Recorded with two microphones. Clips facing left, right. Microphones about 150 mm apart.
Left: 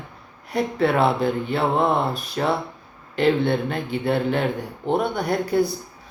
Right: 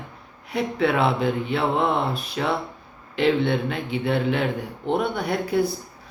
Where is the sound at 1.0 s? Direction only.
Centre (ahead or behind).